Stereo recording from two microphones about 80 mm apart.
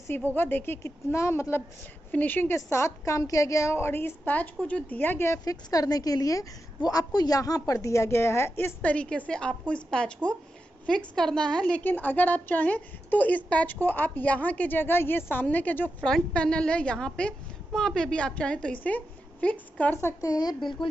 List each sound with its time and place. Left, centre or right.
0.3 s a woman's voice: left
1.1 s a woman's voice: left
2.0 s a woman's voice: left
5.4 s a woman's voice: left
8.8 s a woman's voice: centre
16.0 s a woman's voice: centre; by 20.2 s left
20.2 s speech: left